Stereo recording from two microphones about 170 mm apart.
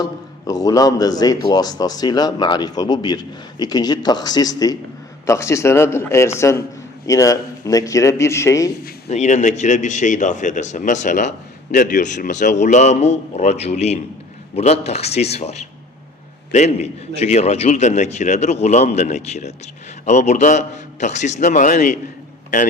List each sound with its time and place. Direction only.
0.0 s a man's voice: 20° left (ahead or behind)
9.0 s a man's voice: 40° left (ahead or behind)